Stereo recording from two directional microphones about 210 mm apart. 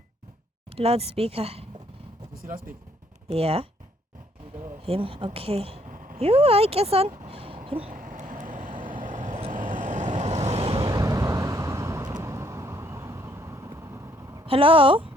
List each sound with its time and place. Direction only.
0.8 s speech: 30° right (ahead or behind)
2.4 s speech: 40° right (ahead or behind)
3.2 s speech: 25° right (ahead or behind)
4.9 s speech: 25° right (ahead or behind)
7.3 s a sound: 25° right (ahead or behind)
7.9 s vehicle: 40° right (ahead or behind); by 14.4 s 15° right (ahead or behind)
14.4 s speech: 25° right (ahead or behind)